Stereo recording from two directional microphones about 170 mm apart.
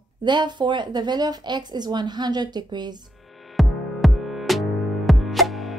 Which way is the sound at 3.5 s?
Centre (ahead or behind).